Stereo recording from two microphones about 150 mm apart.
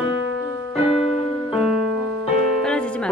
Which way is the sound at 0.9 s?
40° left (ahead or behind).